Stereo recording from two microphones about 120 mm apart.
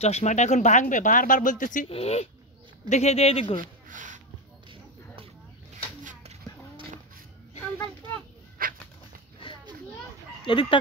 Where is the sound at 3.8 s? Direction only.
90° right.